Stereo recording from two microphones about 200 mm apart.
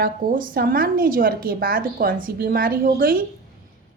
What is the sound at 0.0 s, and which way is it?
Speech, 45° right (ahead or behind).